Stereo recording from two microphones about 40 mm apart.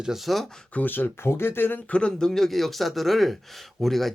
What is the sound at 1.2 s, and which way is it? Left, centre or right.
Speech, left.